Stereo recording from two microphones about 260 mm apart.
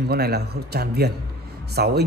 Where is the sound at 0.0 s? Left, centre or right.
Right.